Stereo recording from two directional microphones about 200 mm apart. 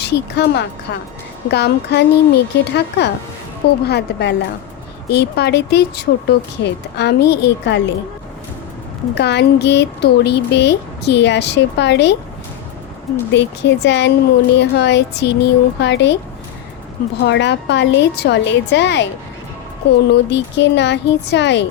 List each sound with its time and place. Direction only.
0.0 s speech: 55° left (ahead or behind)
9.1 s speech: 55° left (ahead or behind)
13.3 s speech: 60° left (ahead or behind)
17.2 s speech: 60° left (ahead or behind)
20.1 s speech: 60° left (ahead or behind)